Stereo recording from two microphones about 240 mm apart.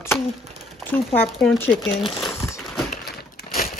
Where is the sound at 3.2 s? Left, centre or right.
Left.